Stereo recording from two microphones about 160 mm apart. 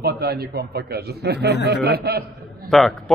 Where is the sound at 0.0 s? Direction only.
85° right.